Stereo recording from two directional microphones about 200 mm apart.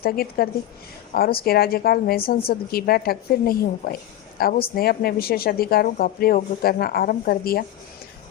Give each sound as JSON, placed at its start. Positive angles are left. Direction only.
{"t": 0.0, "sound": "a woman's voice", "side_deg": 50}